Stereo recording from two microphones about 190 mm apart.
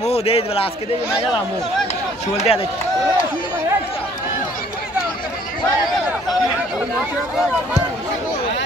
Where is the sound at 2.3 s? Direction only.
30° left (ahead or behind).